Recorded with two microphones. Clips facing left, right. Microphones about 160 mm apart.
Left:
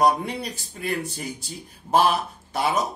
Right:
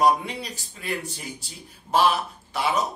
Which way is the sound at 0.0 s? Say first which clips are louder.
Even; 50° left (ahead or behind).